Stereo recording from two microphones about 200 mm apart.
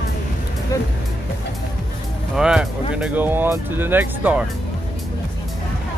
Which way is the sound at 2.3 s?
5° right (ahead or behind).